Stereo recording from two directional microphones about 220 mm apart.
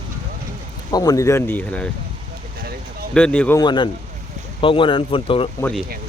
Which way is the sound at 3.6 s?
20° left (ahead or behind).